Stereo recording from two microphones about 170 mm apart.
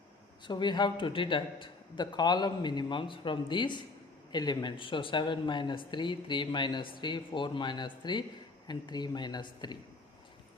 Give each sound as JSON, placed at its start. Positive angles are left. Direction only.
{"t": 0.4, "sound": "speech", "side_deg": 25}